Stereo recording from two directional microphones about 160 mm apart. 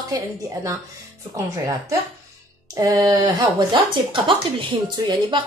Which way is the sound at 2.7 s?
20° right (ahead or behind).